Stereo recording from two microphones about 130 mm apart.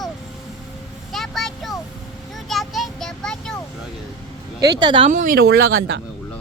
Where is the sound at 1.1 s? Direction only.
Centre (ahead or behind).